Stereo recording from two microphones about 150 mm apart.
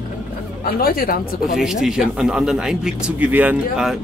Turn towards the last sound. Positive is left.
turn(degrees=-5)  # may be behind; listen again after turning